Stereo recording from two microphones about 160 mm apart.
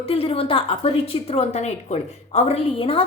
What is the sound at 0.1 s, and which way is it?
A woman's voice, 35° left (ahead or behind).